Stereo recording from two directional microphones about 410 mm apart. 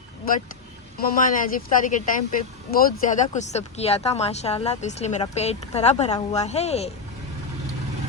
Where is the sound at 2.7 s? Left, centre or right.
Centre.